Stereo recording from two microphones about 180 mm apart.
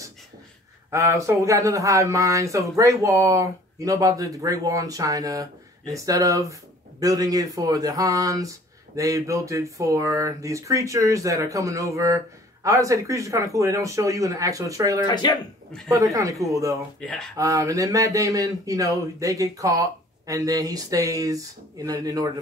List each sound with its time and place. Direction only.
0.8 s speech: 15° right (ahead or behind)
15.0 s speech: 25° left (ahead or behind)
15.9 s speech: 20° right (ahead or behind)
17.0 s speech: 5° left (ahead or behind)
17.4 s speech: 15° right (ahead or behind)